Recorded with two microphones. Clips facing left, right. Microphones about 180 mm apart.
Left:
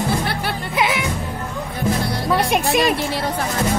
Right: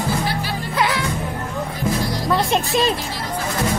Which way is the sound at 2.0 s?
60° left (ahead or behind).